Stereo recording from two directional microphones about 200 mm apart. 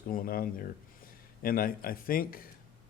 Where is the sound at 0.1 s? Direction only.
45° left (ahead or behind).